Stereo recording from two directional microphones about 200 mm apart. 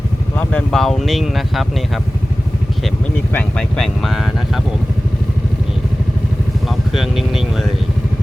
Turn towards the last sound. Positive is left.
turn(degrees=0)  # may be behind; listen again after turning